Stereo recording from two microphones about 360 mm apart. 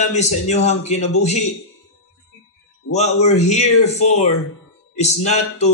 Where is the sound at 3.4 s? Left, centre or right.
Centre.